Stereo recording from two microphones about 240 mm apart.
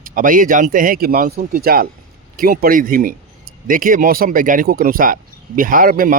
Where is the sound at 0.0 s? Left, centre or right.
Right.